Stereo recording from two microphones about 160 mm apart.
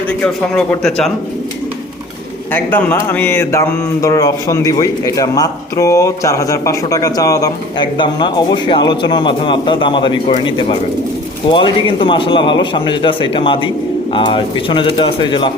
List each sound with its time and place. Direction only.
0.1 s a man's voice: 10° left (ahead or behind)
2.5 s a man's voice: 10° left (ahead or behind); by 15.5 s 30° left (ahead or behind)